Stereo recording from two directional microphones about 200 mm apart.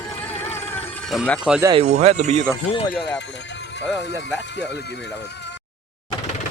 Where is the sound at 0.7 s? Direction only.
5° left (ahead or behind).